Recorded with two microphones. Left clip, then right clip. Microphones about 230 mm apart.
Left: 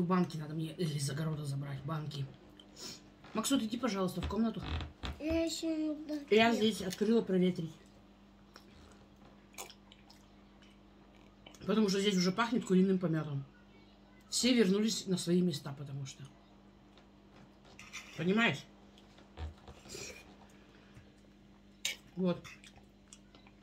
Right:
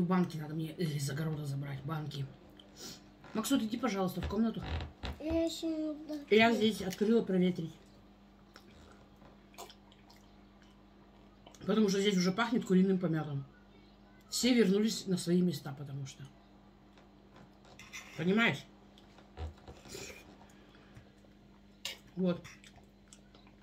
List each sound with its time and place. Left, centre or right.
0.1 s speech: centre
3.3 s speech: centre
5.2 s child singing: left
6.2 s speech: centre
11.6 s speech: centre
14.3 s speech: centre
18.1 s speech: centre
19.9 s dog: centre